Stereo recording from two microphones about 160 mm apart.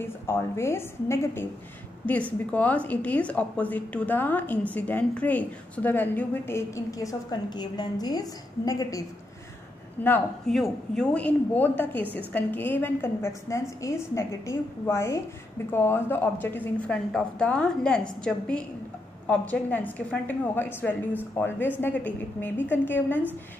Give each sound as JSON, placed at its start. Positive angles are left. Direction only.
{"t": 0.0, "sound": "a woman's voice", "side_deg": 15}
{"t": 10.0, "sound": "a woman's voice", "side_deg": 10}
{"t": 19.2, "sound": "a woman's voice", "side_deg": 10}